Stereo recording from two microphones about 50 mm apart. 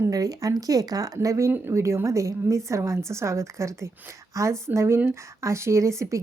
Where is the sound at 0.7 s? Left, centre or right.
Right.